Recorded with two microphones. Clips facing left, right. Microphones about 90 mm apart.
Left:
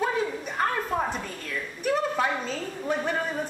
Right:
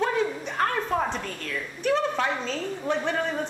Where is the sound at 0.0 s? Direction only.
10° left (ahead or behind).